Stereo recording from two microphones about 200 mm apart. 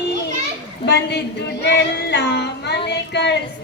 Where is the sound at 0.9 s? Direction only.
55° left (ahead or behind).